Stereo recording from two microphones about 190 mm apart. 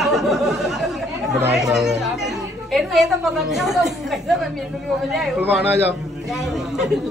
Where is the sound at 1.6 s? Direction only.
Centre (ahead or behind).